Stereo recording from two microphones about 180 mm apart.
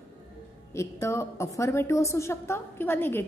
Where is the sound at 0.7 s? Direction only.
15° left (ahead or behind).